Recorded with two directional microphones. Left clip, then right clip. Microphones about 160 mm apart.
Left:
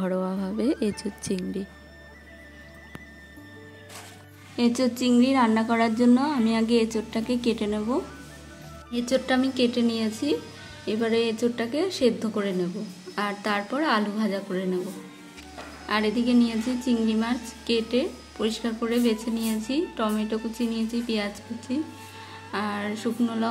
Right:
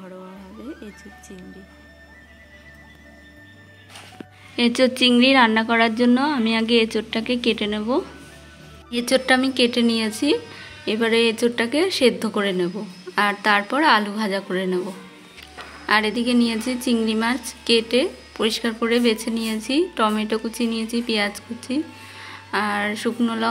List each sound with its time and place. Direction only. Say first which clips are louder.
0.0 s music: left 11 dB; 40° left (ahead or behind)
4.6 s a woman's voice: right 7 dB; 5° right (ahead or behind)
15.9 s a woman's voice: right 5 dB; 10° right (ahead or behind)